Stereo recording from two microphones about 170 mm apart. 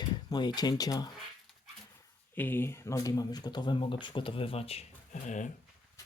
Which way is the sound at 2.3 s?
10° left (ahead or behind).